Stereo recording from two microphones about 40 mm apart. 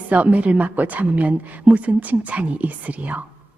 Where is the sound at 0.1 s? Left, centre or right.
Right.